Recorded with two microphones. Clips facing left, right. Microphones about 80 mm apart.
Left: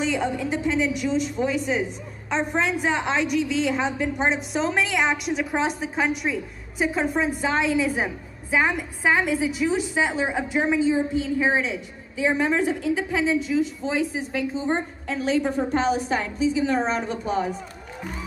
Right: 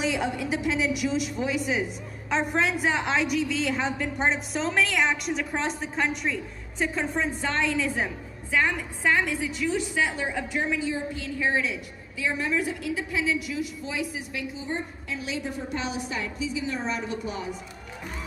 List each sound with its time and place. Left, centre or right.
0.0 s a woman's voice: centre; by 17.6 s left